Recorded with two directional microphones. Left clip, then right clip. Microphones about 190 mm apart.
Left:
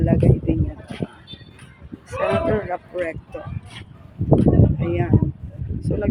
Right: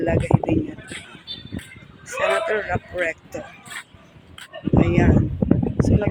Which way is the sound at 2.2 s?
15° left (ahead or behind).